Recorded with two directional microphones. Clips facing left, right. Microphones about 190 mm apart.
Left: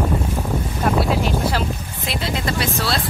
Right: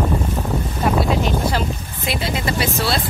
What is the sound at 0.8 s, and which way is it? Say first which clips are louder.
Speech: right 1 dB; 5° left (ahead or behind).